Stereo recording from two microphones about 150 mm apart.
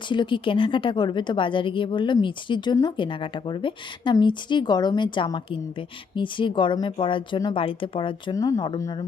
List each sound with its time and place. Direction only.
0.1 s a woman's voice: 30° left (ahead or behind)